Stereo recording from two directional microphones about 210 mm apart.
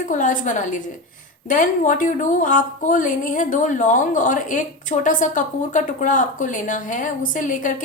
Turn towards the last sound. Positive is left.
turn(degrees=40)  # may be behind; listen again after turning